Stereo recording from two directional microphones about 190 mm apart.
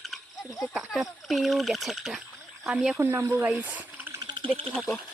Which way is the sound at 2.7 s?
Centre (ahead or behind).